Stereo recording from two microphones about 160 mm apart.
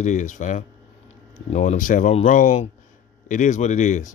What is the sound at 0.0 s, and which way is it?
Speech, 50° left (ahead or behind).